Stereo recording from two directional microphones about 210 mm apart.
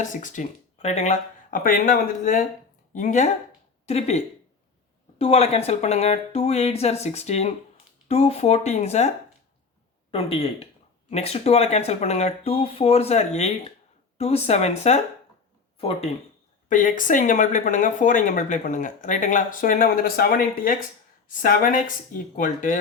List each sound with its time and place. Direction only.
0.0 s speech: 35° left (ahead or behind)
16.6 s speech: 40° left (ahead or behind)